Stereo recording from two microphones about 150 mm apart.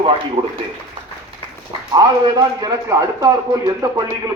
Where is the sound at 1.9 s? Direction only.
25° right (ahead or behind).